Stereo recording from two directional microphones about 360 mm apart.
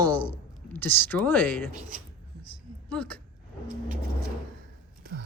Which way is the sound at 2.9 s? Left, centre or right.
Centre.